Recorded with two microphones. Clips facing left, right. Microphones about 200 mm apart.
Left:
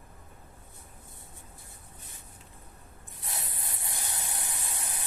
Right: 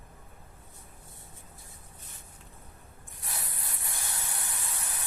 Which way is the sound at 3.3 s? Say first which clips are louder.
Left 1 dB; 20° left (ahead or behind).